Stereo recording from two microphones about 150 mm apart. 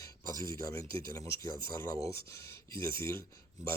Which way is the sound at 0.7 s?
20° left (ahead or behind).